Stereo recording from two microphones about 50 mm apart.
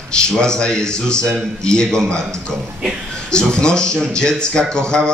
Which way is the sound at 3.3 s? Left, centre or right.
Centre.